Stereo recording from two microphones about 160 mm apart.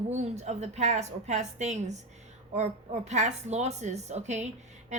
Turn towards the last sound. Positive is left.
turn(degrees=-45)  # may be behind; listen again after turning